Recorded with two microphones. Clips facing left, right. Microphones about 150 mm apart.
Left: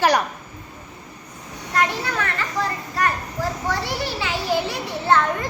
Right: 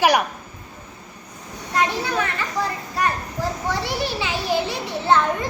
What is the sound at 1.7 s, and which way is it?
Speech, 20° right (ahead or behind).